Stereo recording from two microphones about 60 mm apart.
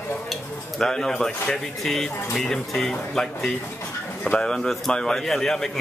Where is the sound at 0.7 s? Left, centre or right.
Centre.